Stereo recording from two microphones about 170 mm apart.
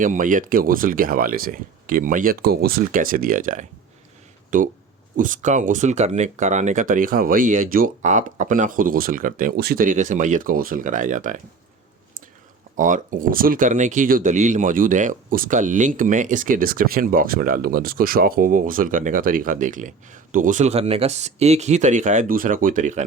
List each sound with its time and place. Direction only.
0.0 s speech: 50° right (ahead or behind)
12.7 s speech: 50° right (ahead or behind)